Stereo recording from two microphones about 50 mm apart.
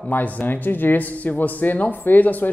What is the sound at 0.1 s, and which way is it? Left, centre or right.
Speech, left.